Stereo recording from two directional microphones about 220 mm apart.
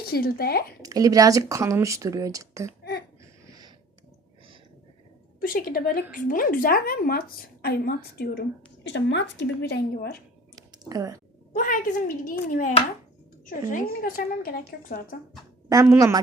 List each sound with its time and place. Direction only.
0.0 s a woman's voice: 45° left (ahead or behind)
0.8 s speech: 15° right (ahead or behind)
5.4 s a woman's voice: 40° left (ahead or behind)
10.7 s speech: 15° right (ahead or behind)
11.5 s a woman's voice: 35° left (ahead or behind)
15.7 s speech: 15° right (ahead or behind)